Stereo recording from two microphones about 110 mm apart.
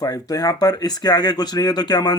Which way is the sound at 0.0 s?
35° left (ahead or behind).